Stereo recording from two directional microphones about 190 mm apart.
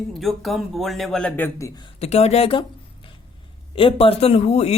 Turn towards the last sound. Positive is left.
turn(degrees=35)  # may be behind; listen again after turning